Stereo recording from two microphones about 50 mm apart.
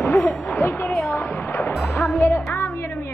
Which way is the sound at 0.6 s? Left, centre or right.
Left.